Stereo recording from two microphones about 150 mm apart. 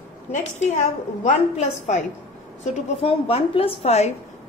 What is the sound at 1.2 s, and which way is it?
A woman's voice, 50° left (ahead or behind).